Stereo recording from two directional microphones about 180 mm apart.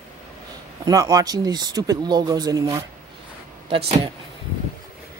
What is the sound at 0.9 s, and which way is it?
Speech, 20° right (ahead or behind).